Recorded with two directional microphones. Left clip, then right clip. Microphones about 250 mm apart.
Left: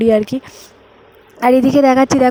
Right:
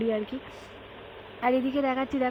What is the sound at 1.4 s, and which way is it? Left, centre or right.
Speech, left.